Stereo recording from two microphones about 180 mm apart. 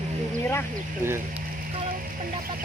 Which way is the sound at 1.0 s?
15° right (ahead or behind).